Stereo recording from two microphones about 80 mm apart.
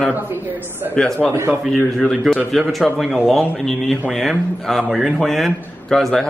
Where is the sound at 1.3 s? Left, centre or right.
Right.